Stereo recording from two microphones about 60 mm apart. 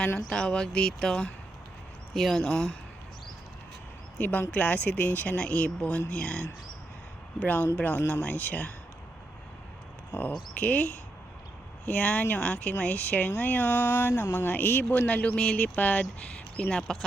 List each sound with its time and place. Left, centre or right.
0.3 s speech: centre
4.2 s speech: left
7.3 s speech: left
10.1 s speech: left
11.9 s speech: left
16.7 s speech: centre